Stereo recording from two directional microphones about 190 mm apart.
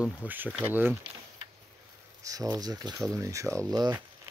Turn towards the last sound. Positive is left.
turn(degrees=-20)  # may be behind; listen again after turning